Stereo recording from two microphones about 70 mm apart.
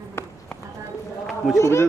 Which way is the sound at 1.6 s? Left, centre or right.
Left.